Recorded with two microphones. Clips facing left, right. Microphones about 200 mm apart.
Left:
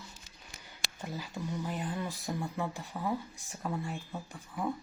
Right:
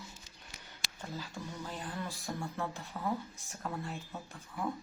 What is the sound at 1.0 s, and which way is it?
Music, 15° left (ahead or behind).